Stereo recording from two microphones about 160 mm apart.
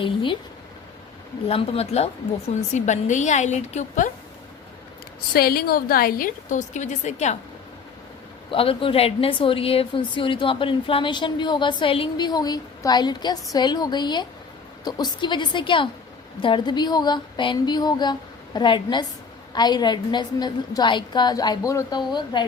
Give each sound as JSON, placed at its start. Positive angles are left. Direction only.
{"t": 0.0, "sound": "a woman's voice", "side_deg": 30}
{"t": 1.5, "sound": "a woman's voice", "side_deg": 40}
{"t": 5.3, "sound": "a woman's voice", "side_deg": 70}
{"t": 8.4, "sound": "a woman's voice", "side_deg": 35}